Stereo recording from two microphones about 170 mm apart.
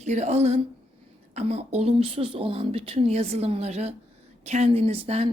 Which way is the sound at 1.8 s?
35° right (ahead or behind).